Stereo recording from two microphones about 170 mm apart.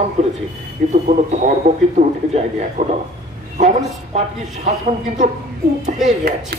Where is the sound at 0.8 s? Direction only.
55° right (ahead or behind).